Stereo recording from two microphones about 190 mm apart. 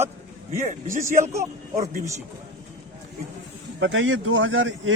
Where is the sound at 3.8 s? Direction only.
90° right.